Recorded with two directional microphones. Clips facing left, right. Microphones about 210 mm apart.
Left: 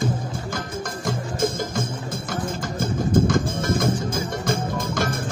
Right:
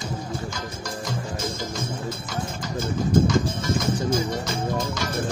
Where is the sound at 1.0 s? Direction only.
50° left (ahead or behind).